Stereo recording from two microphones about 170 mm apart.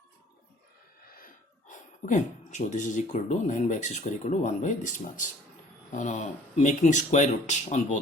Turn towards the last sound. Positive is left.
turn(degrees=45)  # may be behind; listen again after turning